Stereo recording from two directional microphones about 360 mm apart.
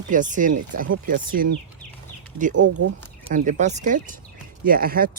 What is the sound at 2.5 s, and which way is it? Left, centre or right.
Speech, right.